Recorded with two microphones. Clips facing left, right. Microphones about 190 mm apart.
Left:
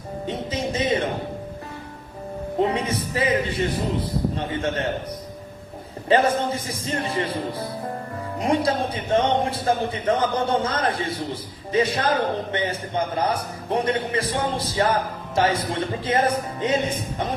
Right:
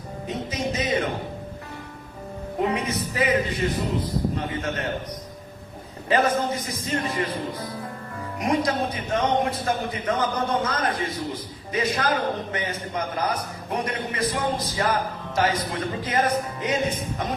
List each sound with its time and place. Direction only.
0.3 s speech: 30° left (ahead or behind)
2.6 s a man's voice: 30° left (ahead or behind)
6.1 s a man's voice: 30° left (ahead or behind)